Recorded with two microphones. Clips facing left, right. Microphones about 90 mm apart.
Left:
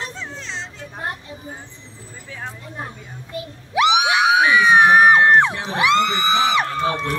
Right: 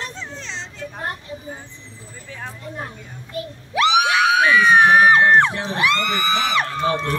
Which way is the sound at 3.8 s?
15° left (ahead or behind).